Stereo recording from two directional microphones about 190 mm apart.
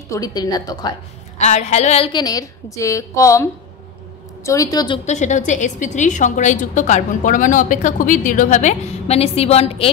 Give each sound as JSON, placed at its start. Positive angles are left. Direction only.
{"t": 0.1, "sound": "a woman's voice", "side_deg": 20}
{"t": 1.4, "sound": "a woman's voice", "side_deg": 35}
{"t": 2.1, "sound": "a woman's voice", "side_deg": 20}
{"t": 4.5, "sound": "a woman's voice", "side_deg": 20}
{"t": 5.0, "sound": "a woman's voice", "side_deg": 40}